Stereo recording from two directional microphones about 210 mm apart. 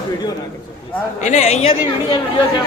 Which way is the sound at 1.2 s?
35° left (ahead or behind).